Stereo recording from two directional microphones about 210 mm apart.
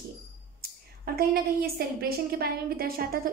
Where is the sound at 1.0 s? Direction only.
45° right (ahead or behind).